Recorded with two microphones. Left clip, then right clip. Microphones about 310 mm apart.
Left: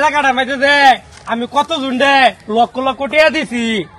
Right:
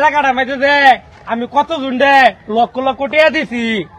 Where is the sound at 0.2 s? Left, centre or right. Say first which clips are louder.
Even; centre.